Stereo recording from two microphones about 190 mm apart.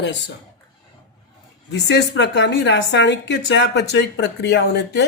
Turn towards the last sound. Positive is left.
turn(degrees=60)  # may be behind; listen again after turning